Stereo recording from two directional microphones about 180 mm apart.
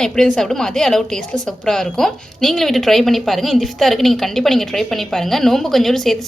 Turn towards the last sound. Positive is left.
turn(degrees=0)  # may be behind; listen again after turning